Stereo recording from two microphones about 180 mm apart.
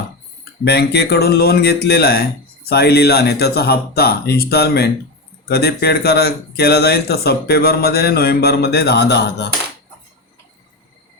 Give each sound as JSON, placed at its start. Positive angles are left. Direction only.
{"t": 0.6, "sound": "speech", "side_deg": 65}